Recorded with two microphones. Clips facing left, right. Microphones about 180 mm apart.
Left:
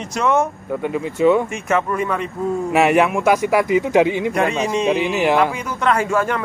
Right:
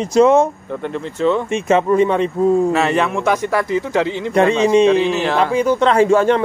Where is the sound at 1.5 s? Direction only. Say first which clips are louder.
Right 6 dB; 25° right (ahead or behind).